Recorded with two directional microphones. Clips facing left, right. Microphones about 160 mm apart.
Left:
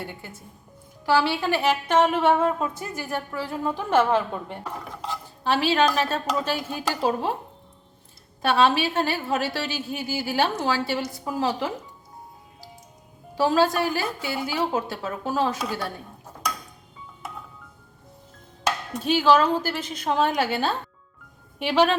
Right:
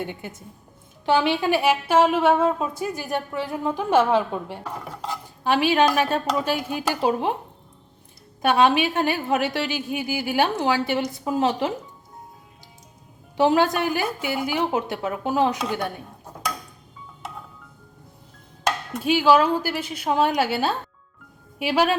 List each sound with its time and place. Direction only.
0.0 s a woman's voice: 20° right (ahead or behind)
8.4 s a woman's voice: 15° right (ahead or behind)
13.3 s a woman's voice: 20° right (ahead or behind)
19.0 s a woman's voice: 10° right (ahead or behind)